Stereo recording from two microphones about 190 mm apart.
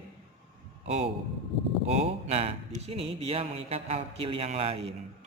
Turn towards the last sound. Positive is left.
turn(degrees=-30)  # may be behind; listen again after turning